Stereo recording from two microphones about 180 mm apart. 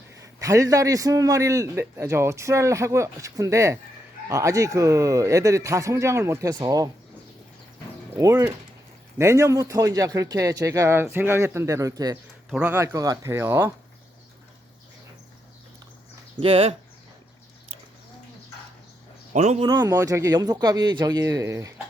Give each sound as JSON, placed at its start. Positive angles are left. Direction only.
{"t": 0.1, "sound": "a man's voice", "side_deg": -15}
{"t": 8.2, "sound": "a man's voice", "side_deg": -15}
{"t": 12.5, "sound": "a man's voice", "side_deg": -5}
{"t": 16.4, "sound": "speech", "side_deg": -30}
{"t": 19.3, "sound": "a man's voice", "side_deg": -40}
{"t": 19.6, "sound": "speech", "side_deg": -20}